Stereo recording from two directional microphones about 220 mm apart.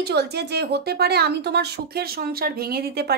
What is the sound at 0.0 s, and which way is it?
Speech, 50° right (ahead or behind).